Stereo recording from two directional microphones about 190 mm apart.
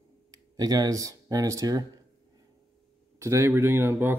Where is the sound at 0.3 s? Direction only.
20° right (ahead or behind).